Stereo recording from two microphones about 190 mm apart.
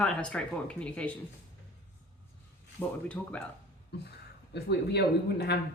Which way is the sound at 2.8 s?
5° left (ahead or behind).